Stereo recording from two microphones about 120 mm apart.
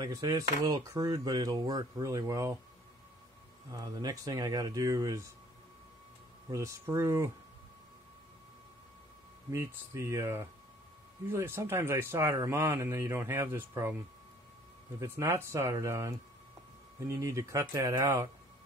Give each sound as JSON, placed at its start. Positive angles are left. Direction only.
{"t": 0.0, "sound": "speech", "side_deg": -30}
{"t": 3.7, "sound": "speech", "side_deg": -30}
{"t": 6.5, "sound": "speech", "side_deg": -25}
{"t": 9.5, "sound": "speech", "side_deg": -25}
{"t": 15.0, "sound": "speech", "side_deg": -20}